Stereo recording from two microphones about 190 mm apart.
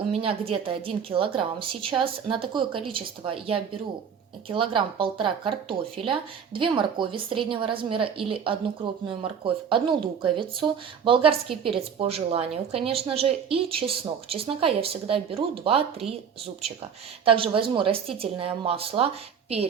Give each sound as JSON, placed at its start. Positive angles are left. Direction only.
{"t": 0.1, "sound": "a woman's voice", "side_deg": -30}
{"t": 17.2, "sound": "a woman's voice", "side_deg": -30}